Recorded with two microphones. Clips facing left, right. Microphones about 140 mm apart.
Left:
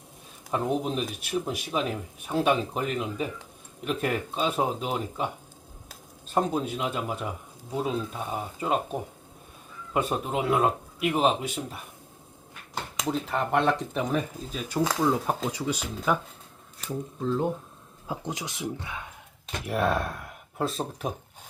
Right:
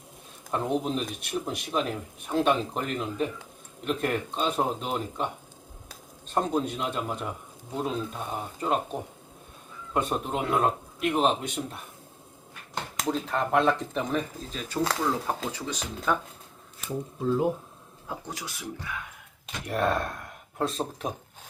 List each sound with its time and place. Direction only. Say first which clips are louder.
0.5 s speech: even; 5° left (ahead or behind)
13.0 s speech: even; centre (ahead or behind)
16.7 s speech: even; 5° right (ahead or behind)
18.1 s speech: left 3 dB; 20° left (ahead or behind)
19.6 s speech: even; 5° left (ahead or behind)